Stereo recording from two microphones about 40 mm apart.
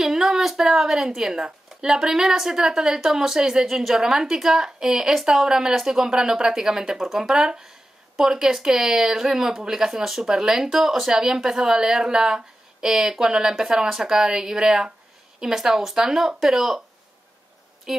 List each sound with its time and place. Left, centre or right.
0.0 s a woman's voice: centre
17.9 s speech: centre